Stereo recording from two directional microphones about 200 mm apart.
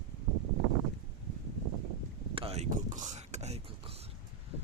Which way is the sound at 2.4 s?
30° right (ahead or behind).